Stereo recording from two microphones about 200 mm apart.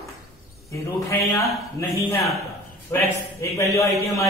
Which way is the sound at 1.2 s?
15° left (ahead or behind).